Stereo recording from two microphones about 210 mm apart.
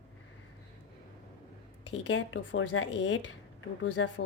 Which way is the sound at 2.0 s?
65° left (ahead or behind).